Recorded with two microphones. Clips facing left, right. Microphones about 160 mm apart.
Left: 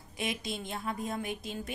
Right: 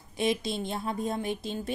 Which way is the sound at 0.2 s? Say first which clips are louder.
Right 7 dB; 30° right (ahead or behind).